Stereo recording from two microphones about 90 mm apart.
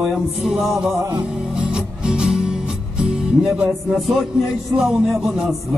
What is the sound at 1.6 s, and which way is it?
Music, 10° right (ahead or behind).